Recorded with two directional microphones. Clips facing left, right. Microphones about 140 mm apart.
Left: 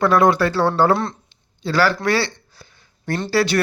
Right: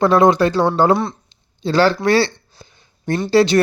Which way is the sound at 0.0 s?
20° right (ahead or behind).